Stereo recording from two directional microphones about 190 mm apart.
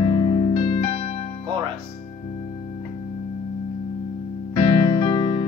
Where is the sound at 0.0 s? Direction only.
25° left (ahead or behind).